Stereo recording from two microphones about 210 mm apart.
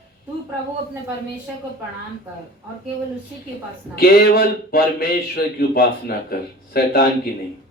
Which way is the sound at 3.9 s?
45° left (ahead or behind).